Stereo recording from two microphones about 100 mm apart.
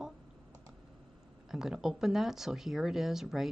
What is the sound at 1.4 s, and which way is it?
Speech, 5° right (ahead or behind).